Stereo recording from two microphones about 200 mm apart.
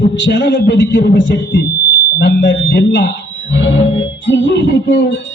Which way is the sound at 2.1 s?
60° left (ahead or behind).